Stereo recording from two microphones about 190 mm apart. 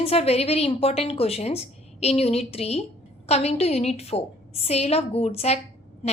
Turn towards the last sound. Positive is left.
turn(degrees=35)  # may be behind; listen again after turning